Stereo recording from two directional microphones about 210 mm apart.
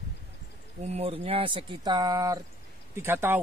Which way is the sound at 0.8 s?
30° right (ahead or behind).